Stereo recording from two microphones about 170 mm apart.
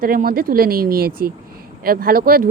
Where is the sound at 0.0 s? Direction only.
55° right (ahead or behind).